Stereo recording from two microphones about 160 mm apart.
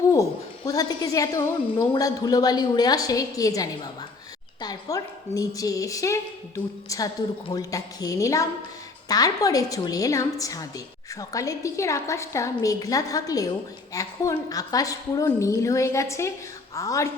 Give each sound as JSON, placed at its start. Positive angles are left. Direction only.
{"t": 0.1, "sound": "a woman's voice", "side_deg": 20}
{"t": 7.5, "sound": "a woman's voice", "side_deg": 20}